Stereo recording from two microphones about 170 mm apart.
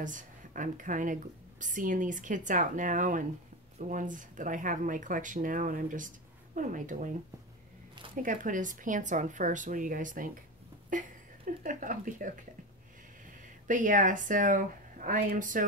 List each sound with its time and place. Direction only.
0.0 s a woman's voice: 50° right (ahead or behind)
8.2 s a woman's voice: 50° right (ahead or behind)
13.7 s a woman's voice: 50° right (ahead or behind)